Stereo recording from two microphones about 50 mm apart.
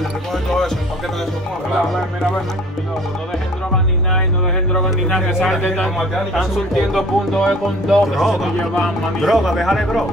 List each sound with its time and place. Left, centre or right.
0.3 s music: centre
5.1 s speech: centre
6.7 s speech: centre